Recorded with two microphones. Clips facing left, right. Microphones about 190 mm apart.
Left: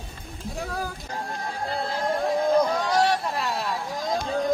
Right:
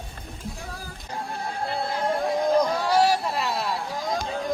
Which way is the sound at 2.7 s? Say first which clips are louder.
Right 1 dB; 5° right (ahead or behind).